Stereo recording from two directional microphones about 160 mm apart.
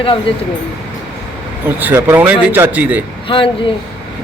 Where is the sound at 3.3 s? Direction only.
35° left (ahead or behind).